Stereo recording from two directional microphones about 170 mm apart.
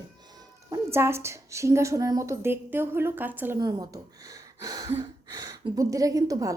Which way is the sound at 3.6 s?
20° right (ahead or behind).